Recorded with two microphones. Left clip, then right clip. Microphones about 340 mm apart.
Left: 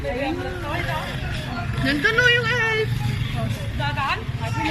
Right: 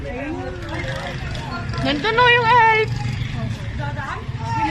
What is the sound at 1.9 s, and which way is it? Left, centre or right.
Speech, centre.